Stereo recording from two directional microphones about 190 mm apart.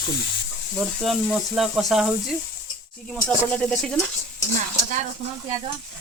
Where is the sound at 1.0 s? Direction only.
Centre (ahead or behind).